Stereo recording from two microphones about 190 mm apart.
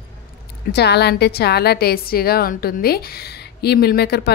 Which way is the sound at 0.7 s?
60° left (ahead or behind).